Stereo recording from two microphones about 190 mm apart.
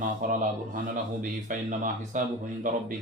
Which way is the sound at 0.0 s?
45° right (ahead or behind).